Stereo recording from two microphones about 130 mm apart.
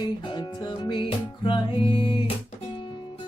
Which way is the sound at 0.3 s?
40° left (ahead or behind).